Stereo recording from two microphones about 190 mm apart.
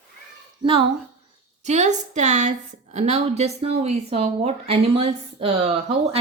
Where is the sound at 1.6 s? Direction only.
35° right (ahead or behind).